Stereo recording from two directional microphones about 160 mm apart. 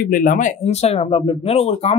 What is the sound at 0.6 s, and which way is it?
Speech, 40° left (ahead or behind).